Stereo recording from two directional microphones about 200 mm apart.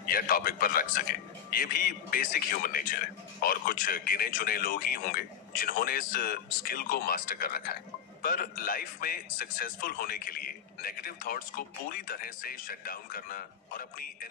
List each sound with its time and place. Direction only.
0.0 s a man's voice: 45° left (ahead or behind)